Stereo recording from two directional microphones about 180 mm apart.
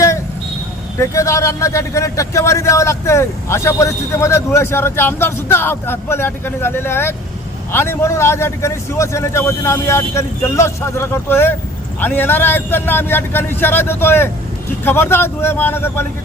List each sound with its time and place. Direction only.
0.9 s a man's voice: 15° left (ahead or behind)